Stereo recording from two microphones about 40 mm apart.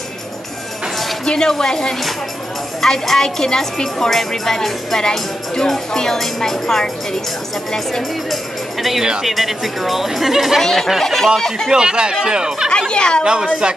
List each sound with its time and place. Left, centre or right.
1.2 s a woman's voice: centre
9.2 s speech: centre
10.6 s a woman's voice: centre
11.7 s speech: centre
12.9 s a woman's voice: left
13.2 s speech: right